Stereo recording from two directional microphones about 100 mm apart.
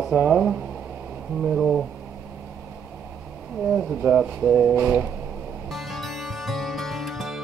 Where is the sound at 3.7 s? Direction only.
15° right (ahead or behind).